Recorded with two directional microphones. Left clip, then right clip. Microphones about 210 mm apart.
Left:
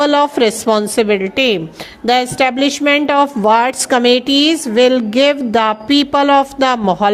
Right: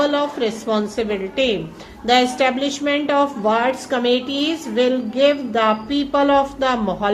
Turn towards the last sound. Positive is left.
turn(degrees=45)  # may be behind; listen again after turning